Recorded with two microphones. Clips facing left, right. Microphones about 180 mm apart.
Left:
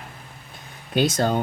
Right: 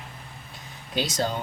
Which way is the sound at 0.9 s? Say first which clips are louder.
Left 6 dB; 55° left (ahead or behind).